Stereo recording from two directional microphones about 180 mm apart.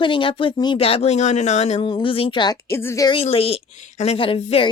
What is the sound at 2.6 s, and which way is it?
Speech, 15° left (ahead or behind).